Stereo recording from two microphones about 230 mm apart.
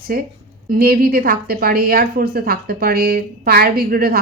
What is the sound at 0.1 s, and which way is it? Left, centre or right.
A woman's voice, right.